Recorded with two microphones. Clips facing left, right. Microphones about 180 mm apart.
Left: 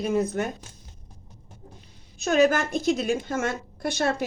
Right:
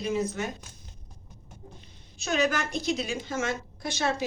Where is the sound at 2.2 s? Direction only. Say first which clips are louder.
Left 7 dB; 55° left (ahead or behind).